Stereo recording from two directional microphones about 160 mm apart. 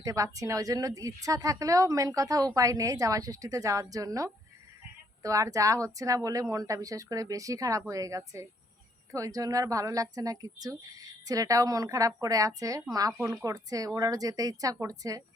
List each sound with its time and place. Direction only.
0.0 s speech: 20° right (ahead or behind)